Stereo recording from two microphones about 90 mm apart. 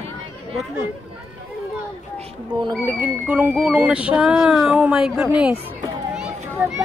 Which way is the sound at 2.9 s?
20° right (ahead or behind).